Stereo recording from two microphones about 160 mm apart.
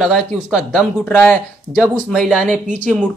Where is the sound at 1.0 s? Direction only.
10° left (ahead or behind).